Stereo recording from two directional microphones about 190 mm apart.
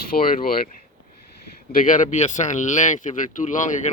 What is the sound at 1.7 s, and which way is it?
Speech, 45° left (ahead or behind).